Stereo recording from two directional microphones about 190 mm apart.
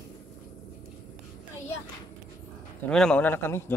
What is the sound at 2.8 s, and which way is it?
Speech, 5° left (ahead or behind).